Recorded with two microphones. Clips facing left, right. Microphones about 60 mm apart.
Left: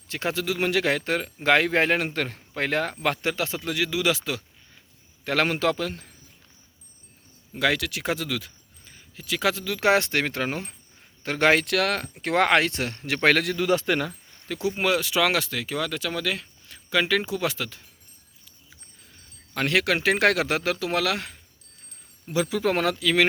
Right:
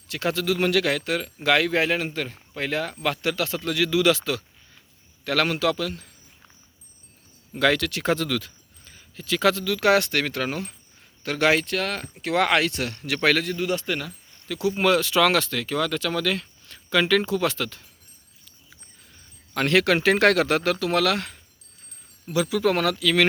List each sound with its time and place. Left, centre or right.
0.1 s speech: left
5.2 s speech: left
7.5 s speech: centre
9.6 s speech: left
11.6 s speech: left
12.2 s speech: left
13.4 s speech: left
14.4 s speech: left
14.8 s speech: centre
19.5 s speech: centre
22.3 s speech: left